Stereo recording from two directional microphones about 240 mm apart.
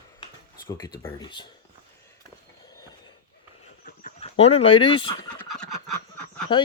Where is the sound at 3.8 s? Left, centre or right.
Left.